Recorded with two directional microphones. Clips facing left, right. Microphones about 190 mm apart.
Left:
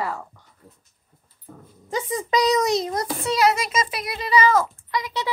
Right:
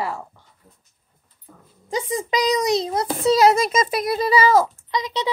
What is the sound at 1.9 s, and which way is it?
Speech, 30° right (ahead or behind).